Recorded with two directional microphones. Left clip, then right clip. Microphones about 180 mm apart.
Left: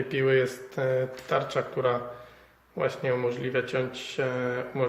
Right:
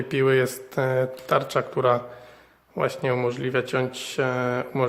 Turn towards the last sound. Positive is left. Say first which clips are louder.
# right 4 dB
turn(degrees=-50)  # may be behind; listen again after turning